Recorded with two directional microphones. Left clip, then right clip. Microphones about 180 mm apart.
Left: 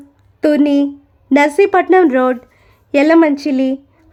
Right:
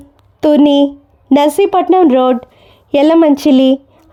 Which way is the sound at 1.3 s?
25° right (ahead or behind).